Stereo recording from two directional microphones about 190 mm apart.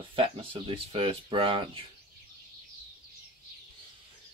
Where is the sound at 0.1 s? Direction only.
30° right (ahead or behind).